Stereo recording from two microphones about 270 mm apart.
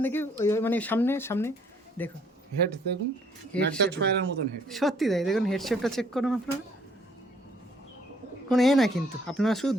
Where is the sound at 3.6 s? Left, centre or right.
Right.